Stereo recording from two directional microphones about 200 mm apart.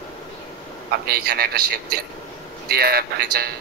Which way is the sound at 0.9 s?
50° right (ahead or behind).